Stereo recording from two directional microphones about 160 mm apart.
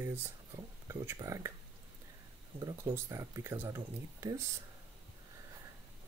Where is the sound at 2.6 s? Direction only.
20° right (ahead or behind).